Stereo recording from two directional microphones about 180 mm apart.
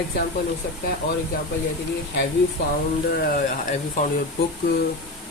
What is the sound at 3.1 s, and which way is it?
Speech, 50° left (ahead or behind).